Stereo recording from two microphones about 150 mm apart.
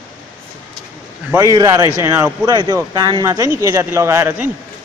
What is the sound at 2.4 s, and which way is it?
Speech, 25° right (ahead or behind).